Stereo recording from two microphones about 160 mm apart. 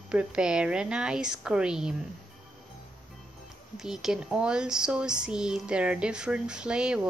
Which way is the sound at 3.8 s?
5° right (ahead or behind).